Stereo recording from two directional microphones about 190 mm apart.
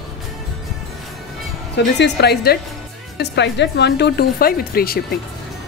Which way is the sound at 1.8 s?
65° left (ahead or behind).